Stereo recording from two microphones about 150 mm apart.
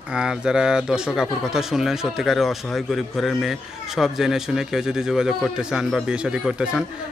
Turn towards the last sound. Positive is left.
turn(degrees=-5)  # may be behind; listen again after turning